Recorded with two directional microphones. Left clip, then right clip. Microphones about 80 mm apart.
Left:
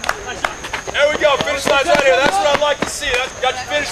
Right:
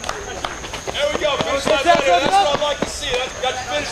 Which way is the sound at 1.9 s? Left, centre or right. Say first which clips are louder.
Left 2 dB; left.